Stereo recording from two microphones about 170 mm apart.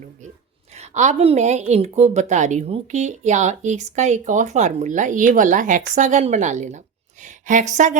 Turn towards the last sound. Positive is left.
turn(degrees=-45)  # may be behind; listen again after turning